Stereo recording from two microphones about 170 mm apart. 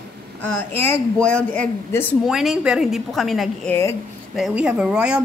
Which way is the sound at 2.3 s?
Centre (ahead or behind).